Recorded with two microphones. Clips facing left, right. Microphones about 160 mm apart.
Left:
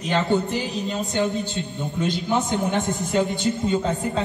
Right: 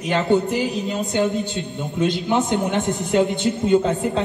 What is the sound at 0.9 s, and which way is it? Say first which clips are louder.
A man's voice: right 2 dB; 20° right (ahead or behind).